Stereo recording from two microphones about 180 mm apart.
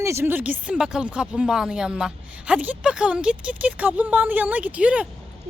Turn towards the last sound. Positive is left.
turn(degrees=-5)  # may be behind; listen again after turning